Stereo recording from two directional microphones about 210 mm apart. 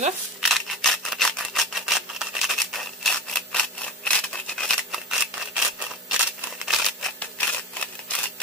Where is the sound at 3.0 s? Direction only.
5° left (ahead or behind).